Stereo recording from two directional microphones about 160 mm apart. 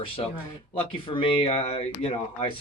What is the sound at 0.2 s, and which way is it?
Speech, 30° left (ahead or behind).